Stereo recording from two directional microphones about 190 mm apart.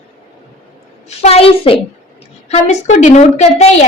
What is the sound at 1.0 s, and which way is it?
A woman's voice, 35° left (ahead or behind).